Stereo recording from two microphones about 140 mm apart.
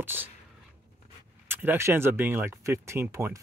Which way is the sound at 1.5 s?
15° right (ahead or behind).